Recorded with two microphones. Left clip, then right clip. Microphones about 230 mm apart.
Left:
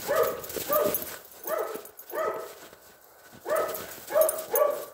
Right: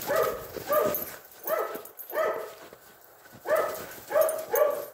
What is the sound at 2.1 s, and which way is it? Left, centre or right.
Dog, right.